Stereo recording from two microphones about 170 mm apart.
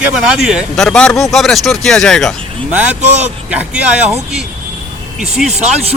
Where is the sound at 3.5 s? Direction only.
10° right (ahead or behind).